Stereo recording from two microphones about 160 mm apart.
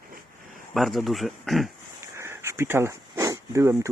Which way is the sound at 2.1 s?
15° right (ahead or behind).